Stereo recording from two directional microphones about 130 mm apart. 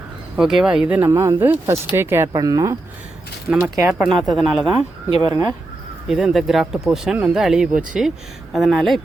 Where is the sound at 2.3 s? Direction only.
30° right (ahead or behind).